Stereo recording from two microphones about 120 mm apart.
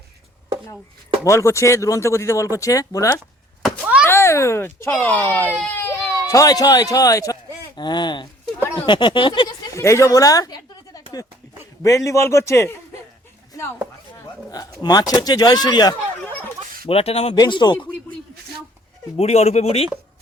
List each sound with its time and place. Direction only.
1.2 s speech: 25° left (ahead or behind)
3.8 s a sound: 10° right (ahead or behind)
4.0 s a child's voice: 20° left (ahead or behind)
5.6 s baby cry: 20° left (ahead or behind)
6.2 s speech: 25° left (ahead or behind)
7.8 s speech: 40° left (ahead or behind)
9.7 s speech: 25° left (ahead or behind)
13.5 s a sound: 20° left (ahead or behind)
14.5 s speech: 35° left (ahead or behind)
16.8 s speech: 55° left (ahead or behind)
17.3 s speech: 35° left (ahead or behind)
19.1 s speech: 60° left (ahead or behind)